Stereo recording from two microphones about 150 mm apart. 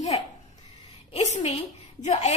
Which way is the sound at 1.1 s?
45° left (ahead or behind).